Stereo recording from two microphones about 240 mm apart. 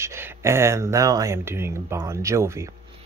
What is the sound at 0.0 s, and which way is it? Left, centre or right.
Speech, centre.